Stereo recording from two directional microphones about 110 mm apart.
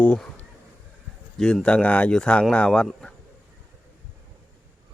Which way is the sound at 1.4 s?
5° left (ahead or behind).